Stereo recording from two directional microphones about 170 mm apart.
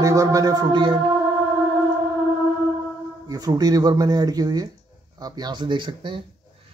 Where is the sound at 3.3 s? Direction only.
20° right (ahead or behind).